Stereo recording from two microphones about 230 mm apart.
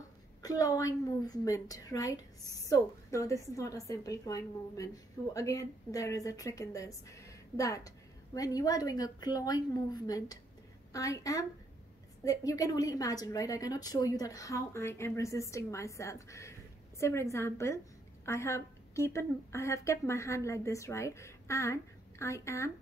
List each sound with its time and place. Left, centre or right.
0.4 s a woman's voice: centre